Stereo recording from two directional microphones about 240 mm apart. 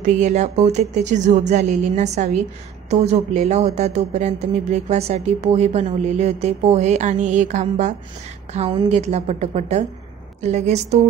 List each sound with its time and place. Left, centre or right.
0.0 s speech: right